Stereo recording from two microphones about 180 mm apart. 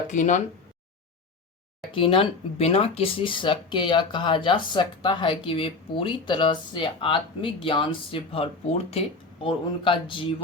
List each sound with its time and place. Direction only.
0.1 s speech: 45° left (ahead or behind)
1.9 s speech: 30° left (ahead or behind)